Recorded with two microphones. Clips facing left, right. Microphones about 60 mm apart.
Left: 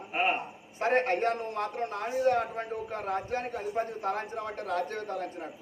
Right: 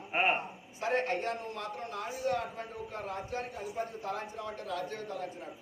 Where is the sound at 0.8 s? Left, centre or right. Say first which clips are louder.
Left 5 dB; left.